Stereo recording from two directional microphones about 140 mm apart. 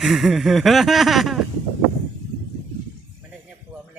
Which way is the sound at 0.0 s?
Centre (ahead or behind).